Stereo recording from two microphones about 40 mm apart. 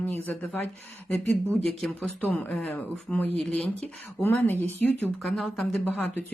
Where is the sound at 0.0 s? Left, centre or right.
Left.